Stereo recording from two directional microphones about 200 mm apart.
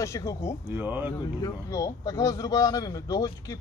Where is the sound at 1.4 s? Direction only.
20° left (ahead or behind).